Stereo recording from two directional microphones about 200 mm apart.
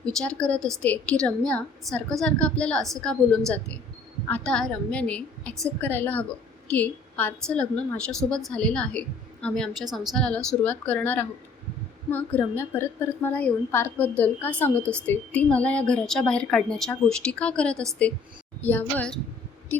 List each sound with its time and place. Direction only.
0.0 s a woman's voice: 5° left (ahead or behind)